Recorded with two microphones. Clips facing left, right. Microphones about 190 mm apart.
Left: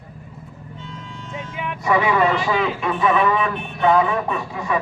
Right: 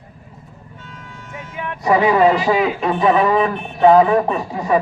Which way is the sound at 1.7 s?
35° right (ahead or behind).